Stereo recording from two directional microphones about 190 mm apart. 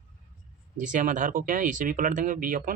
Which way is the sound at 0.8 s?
45° right (ahead or behind).